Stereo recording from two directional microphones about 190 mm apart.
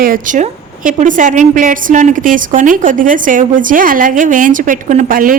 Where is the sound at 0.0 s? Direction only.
45° right (ahead or behind).